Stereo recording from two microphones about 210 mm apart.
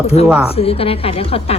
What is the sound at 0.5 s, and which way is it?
A woman's voice, 25° left (ahead or behind).